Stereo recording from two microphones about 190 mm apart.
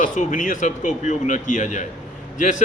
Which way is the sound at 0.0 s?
45° left (ahead or behind).